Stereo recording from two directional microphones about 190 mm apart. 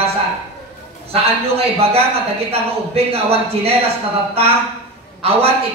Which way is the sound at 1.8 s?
30° right (ahead or behind).